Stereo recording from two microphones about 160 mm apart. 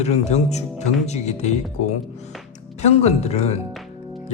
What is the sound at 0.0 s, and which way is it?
Speech, 45° left (ahead or behind).